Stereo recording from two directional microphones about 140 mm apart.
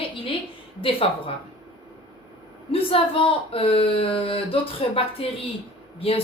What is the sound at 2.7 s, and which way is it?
A woman's voice, 40° left (ahead or behind).